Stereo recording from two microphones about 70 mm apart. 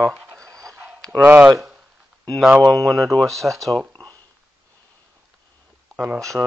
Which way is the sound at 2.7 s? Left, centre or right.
Centre.